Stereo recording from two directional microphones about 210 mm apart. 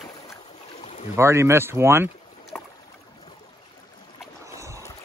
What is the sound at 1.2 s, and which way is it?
Speech, 15° right (ahead or behind).